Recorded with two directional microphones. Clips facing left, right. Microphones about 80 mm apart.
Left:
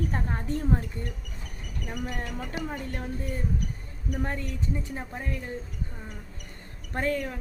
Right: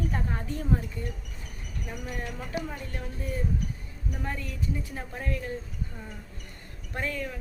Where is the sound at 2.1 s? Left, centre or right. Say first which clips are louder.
Even; left.